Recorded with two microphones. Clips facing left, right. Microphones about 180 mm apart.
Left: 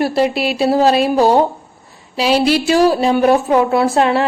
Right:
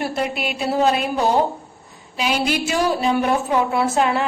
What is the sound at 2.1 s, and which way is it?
Speech, 30° left (ahead or behind).